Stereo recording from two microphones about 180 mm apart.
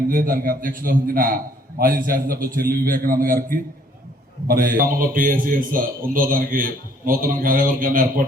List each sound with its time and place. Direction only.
0.1 s a man's voice: 55° right (ahead or behind)